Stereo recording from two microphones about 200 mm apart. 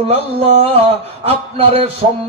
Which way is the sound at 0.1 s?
30° right (ahead or behind).